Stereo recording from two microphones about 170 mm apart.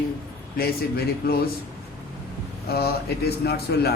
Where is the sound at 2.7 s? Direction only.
65° left (ahead or behind).